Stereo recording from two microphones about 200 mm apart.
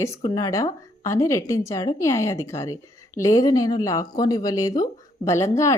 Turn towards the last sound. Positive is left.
turn(degrees=15)  # may be behind; listen again after turning